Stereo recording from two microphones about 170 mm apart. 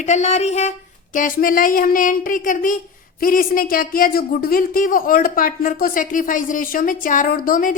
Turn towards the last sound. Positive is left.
turn(degrees=55)  # may be behind; listen again after turning